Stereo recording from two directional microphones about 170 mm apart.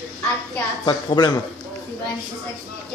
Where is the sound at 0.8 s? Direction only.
25° left (ahead or behind).